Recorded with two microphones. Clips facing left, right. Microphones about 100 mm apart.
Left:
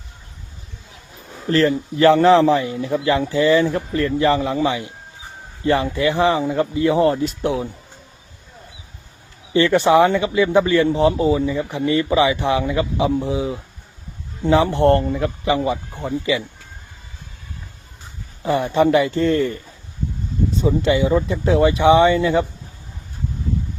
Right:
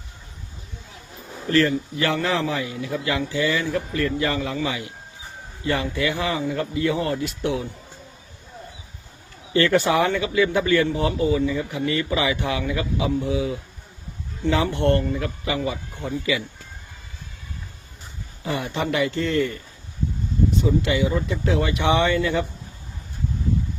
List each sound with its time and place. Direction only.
1.5 s a man's voice: 35° left (ahead or behind)
9.5 s speech: 20° left (ahead or behind)
18.4 s a man's voice: 35° left (ahead or behind)
20.6 s speech: 30° left (ahead or behind)